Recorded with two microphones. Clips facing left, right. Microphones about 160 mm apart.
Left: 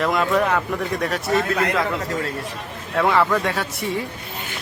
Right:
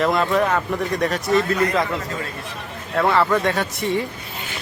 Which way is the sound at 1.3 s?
60° left (ahead or behind).